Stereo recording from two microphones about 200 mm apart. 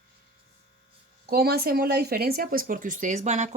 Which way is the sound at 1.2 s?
50° right (ahead or behind).